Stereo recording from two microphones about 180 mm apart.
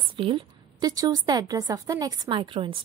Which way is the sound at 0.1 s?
30° right (ahead or behind).